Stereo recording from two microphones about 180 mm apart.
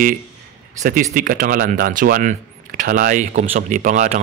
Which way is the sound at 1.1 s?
50° right (ahead or behind).